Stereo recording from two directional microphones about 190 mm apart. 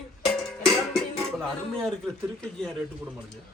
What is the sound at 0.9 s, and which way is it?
Speech, centre (ahead or behind).